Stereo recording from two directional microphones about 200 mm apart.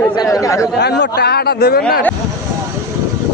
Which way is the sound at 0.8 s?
55° left (ahead or behind).